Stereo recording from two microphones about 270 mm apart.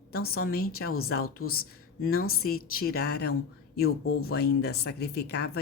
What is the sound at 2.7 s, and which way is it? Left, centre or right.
Speech, left.